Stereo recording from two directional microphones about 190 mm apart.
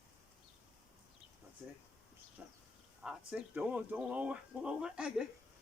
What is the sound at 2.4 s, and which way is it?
Speech, 10° right (ahead or behind).